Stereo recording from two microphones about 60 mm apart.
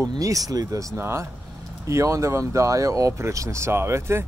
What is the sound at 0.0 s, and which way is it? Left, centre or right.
Speech, right.